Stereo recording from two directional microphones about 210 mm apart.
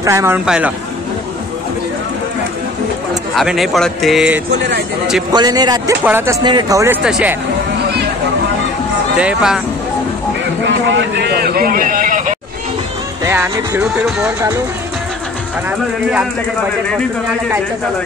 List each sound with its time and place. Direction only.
0.0 s speech: 15° right (ahead or behind)
3.3 s speech: centre (ahead or behind)
5.3 s speech: 20° right (ahead or behind); by 7.3 s 5° right (ahead or behind)
9.2 s speech: 5° right (ahead or behind)
10.6 s a sound: 55° right (ahead or behind); by 12.4 s 40° right (ahead or behind)
13.2 s speech: 10° right (ahead or behind)